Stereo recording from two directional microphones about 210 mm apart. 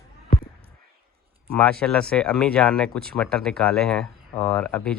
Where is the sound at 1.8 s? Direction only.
5° left (ahead or behind).